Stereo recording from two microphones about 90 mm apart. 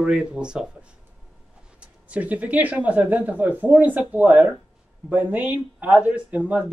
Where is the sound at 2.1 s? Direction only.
15° right (ahead or behind).